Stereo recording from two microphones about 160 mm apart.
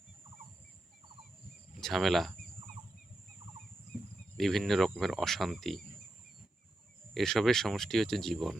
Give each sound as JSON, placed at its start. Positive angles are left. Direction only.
{"t": 1.8, "sound": "speech", "side_deg": 0}
{"t": 4.4, "sound": "speech", "side_deg": 0}
{"t": 7.1, "sound": "speech", "side_deg": 0}